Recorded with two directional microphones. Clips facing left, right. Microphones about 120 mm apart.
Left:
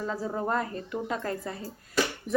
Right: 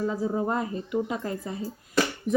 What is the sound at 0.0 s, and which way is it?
Speech, 15° right (ahead or behind).